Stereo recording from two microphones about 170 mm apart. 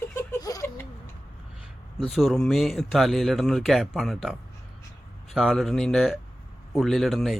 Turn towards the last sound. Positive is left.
turn(degrees=0)  # may be behind; listen again after turning